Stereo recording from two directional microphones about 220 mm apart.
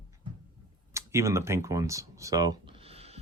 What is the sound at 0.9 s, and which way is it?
Speech, 10° right (ahead or behind).